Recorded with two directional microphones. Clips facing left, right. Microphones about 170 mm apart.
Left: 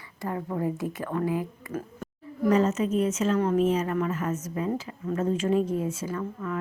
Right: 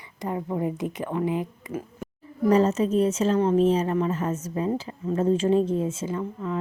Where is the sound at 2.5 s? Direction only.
35° right (ahead or behind).